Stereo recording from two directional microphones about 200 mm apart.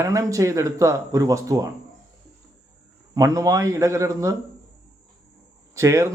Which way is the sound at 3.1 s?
15° right (ahead or behind).